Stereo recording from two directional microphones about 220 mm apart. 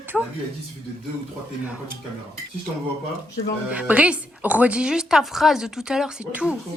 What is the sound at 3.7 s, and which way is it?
Speech, 5° right (ahead or behind).